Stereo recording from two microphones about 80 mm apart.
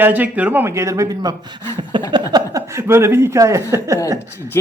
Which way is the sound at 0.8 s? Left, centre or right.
Right.